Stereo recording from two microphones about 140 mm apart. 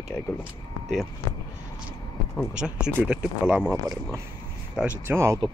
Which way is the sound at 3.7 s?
20° right (ahead or behind).